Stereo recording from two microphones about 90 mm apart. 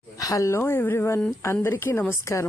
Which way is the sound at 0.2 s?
40° left (ahead or behind).